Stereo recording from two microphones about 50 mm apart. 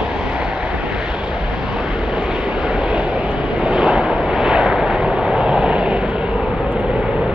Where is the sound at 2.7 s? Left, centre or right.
Right.